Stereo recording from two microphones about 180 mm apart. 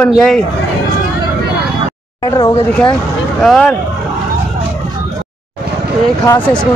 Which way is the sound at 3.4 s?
5° left (ahead or behind).